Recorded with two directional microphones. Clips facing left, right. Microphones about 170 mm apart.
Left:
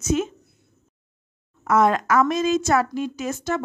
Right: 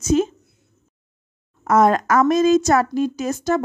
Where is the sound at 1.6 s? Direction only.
40° right (ahead or behind).